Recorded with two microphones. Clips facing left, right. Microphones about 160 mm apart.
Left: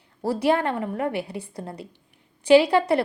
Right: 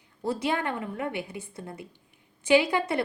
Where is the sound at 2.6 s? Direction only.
70° left (ahead or behind).